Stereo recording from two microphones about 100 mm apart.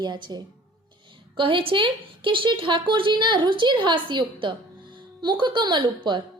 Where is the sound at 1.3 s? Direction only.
60° right (ahead or behind).